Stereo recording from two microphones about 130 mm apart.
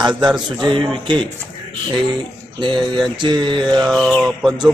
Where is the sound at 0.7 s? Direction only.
40° right (ahead or behind).